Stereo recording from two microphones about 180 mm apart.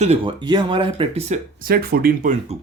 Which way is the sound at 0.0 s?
30° right (ahead or behind).